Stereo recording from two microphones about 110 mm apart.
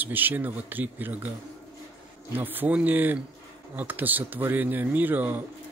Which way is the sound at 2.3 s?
15° right (ahead or behind).